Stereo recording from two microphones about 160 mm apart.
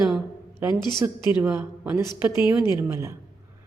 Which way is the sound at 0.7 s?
25° left (ahead or behind).